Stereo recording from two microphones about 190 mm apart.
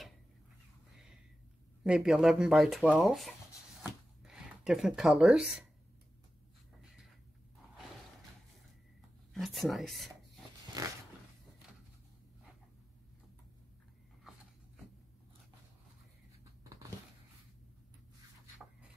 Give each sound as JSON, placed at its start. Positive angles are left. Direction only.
{"t": 1.9, "sound": "speech", "side_deg": -5}
{"t": 9.3, "sound": "speech", "side_deg": 0}
{"t": 10.8, "sound": "a sound", "side_deg": -20}